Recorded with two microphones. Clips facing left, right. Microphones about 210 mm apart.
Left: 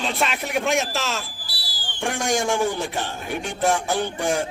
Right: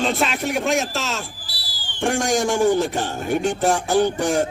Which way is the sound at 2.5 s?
45° right (ahead or behind).